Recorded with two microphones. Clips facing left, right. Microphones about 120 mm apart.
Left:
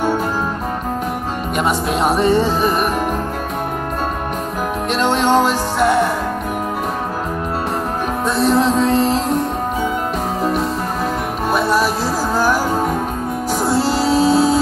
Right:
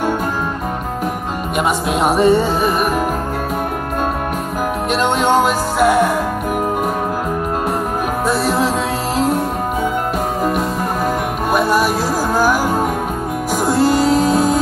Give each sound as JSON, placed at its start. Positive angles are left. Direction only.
{"t": 1.6, "sound": "speech", "side_deg": -5}
{"t": 4.9, "sound": "music", "side_deg": -5}
{"t": 8.3, "sound": "music", "side_deg": -5}
{"t": 11.5, "sound": "music", "side_deg": -5}
{"t": 14.1, "sound": "music", "side_deg": 35}